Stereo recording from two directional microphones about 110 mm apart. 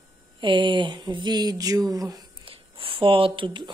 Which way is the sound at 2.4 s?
55° right (ahead or behind).